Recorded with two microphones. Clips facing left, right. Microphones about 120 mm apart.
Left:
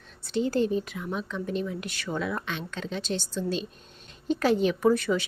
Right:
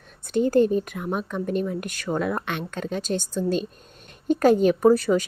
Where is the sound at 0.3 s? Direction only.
50° right (ahead or behind).